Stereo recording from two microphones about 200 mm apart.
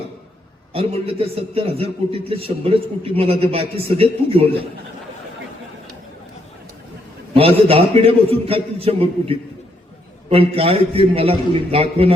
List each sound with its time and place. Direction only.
0.7 s a man's voice: 30° right (ahead or behind)
7.3 s a man's voice: 30° right (ahead or behind)